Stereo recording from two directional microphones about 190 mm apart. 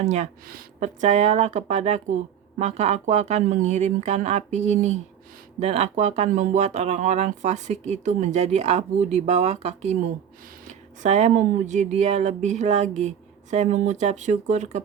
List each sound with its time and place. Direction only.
0.0 s speech: 35° right (ahead or behind)